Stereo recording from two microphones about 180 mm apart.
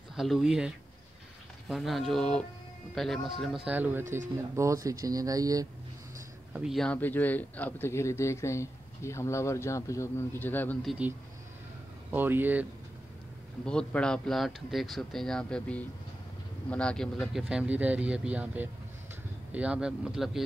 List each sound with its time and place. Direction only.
0.1 s speech: centre (ahead or behind); by 5.7 s 20° right (ahead or behind)
6.5 s speech: centre (ahead or behind)
10.8 s speech: centre (ahead or behind)
12.1 s speech: 10° right (ahead or behind)
13.7 s speech: 5° left (ahead or behind)